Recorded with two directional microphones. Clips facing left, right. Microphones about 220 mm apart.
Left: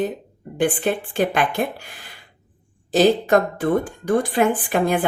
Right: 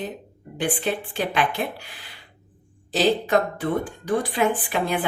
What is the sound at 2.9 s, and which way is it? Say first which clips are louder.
Speech: left 5 dB; 50° left (ahead or behind).